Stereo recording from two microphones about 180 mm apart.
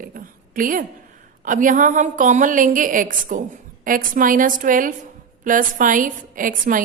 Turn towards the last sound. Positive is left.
turn(degrees=-50)  # may be behind; listen again after turning